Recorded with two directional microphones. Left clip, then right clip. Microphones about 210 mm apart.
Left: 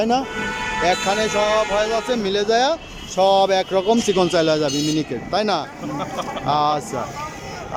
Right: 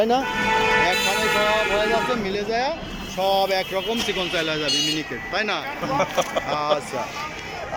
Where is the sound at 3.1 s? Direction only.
20° left (ahead or behind).